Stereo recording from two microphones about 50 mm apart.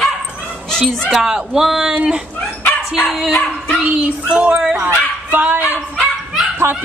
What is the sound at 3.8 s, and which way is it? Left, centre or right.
Music, right.